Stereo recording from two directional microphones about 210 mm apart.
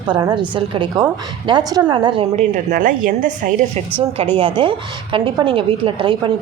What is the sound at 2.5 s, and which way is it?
A woman's voice, 40° right (ahead or behind).